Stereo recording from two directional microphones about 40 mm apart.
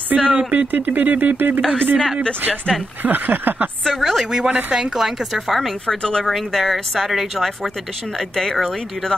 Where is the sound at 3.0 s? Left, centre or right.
Right.